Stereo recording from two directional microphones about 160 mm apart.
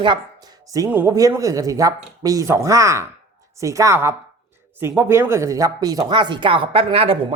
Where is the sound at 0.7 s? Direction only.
15° right (ahead or behind).